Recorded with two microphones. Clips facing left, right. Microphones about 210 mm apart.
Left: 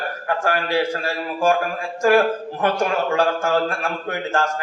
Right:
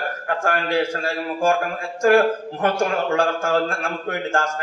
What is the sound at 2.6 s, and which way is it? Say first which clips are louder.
A man's voice: even; 45° right (ahead or behind).